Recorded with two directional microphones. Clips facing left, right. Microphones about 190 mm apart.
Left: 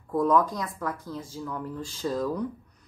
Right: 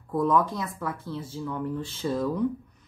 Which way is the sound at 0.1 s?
Centre (ahead or behind).